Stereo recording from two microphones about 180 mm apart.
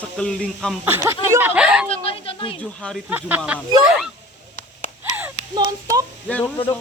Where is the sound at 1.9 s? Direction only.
30° left (ahead or behind).